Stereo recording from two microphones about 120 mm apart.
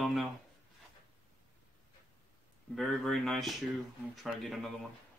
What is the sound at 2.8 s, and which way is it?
Speech, centre (ahead or behind).